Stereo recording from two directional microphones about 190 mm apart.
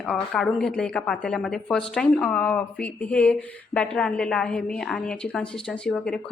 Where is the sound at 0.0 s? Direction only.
5° left (ahead or behind).